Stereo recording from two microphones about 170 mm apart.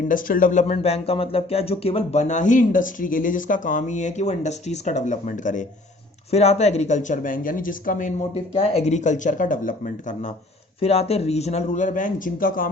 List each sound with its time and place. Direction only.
0.1 s speech: 55° left (ahead or behind)
0.7 s speech: 40° left (ahead or behind)
8.3 s speech: 40° left (ahead or behind)
10.8 s speech: 35° left (ahead or behind); by 12.7 s 55° left (ahead or behind)